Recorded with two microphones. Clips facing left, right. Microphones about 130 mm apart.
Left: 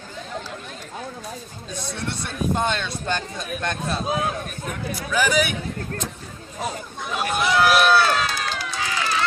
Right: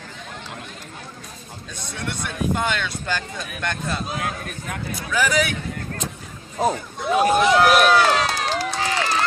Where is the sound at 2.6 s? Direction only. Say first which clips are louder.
Even; 30° left (ahead or behind).